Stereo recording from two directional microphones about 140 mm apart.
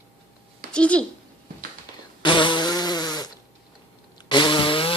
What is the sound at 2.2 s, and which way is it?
Fart, 35° left (ahead or behind).